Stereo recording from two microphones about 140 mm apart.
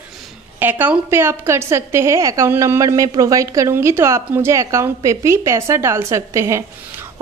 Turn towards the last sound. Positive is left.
turn(degrees=-20)  # may be behind; listen again after turning